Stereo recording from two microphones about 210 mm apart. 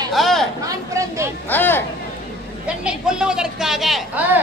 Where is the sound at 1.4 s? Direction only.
10° left (ahead or behind).